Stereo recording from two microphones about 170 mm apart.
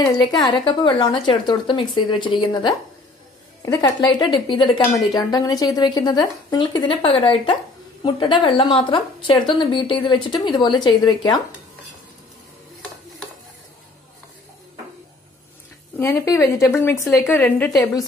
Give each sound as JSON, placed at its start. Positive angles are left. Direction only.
{"t": 0.0, "sound": "speech", "side_deg": 25}
{"t": 16.0, "sound": "a woman's voice", "side_deg": 15}